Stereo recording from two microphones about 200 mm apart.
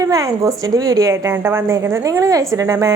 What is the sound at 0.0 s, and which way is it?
A woman's voice, 15° right (ahead or behind).